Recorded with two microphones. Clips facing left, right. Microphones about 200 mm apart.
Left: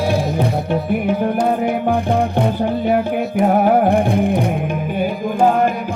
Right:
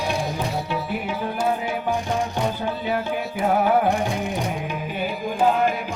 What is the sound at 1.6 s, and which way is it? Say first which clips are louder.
Music: left 8 dB; 60° left (ahead or behind).